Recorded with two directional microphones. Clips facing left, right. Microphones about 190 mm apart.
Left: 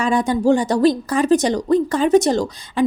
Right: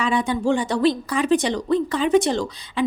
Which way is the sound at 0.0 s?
45° left (ahead or behind).